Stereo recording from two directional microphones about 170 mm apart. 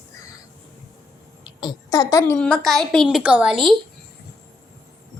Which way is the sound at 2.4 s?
5° left (ahead or behind).